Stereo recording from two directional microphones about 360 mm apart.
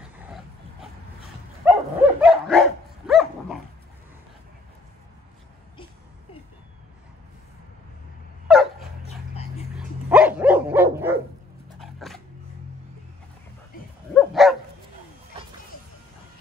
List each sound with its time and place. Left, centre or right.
1.6 s dog: centre
8.5 s dog: centre
9.3 s a sound: centre
9.8 s dog: centre
14.1 s dog: centre